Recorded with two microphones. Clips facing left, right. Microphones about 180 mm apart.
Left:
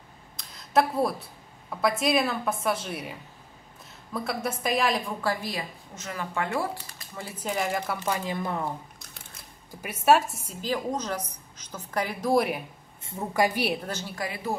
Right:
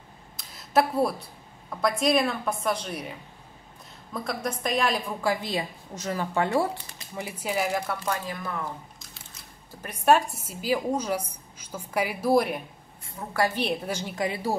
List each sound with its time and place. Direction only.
0.4 s a sound: centre (ahead or behind)
1.8 s a woman's voice: centre (ahead or behind)
5.2 s a woman's voice: 20° right (ahead or behind)
5.9 s speech: 35° right (ahead or behind)
7.2 s a woman's voice: 10° right (ahead or behind)
8.0 s speech: 20° left (ahead or behind)
9.7 s a woman's voice: 10° left (ahead or behind)
13.0 s a woman's voice: 20° left (ahead or behind)
13.8 s a woman's voice: 15° right (ahead or behind)